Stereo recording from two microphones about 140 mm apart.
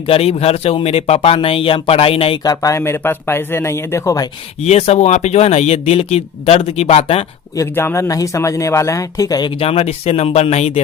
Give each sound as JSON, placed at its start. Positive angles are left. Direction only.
{"t": 0.1, "sound": "speech", "side_deg": 45}
{"t": 2.4, "sound": "speech", "side_deg": 25}
{"t": 4.6, "sound": "speech", "side_deg": 50}
{"t": 7.5, "sound": "speech", "side_deg": 20}
{"t": 9.6, "sound": "speech", "side_deg": 45}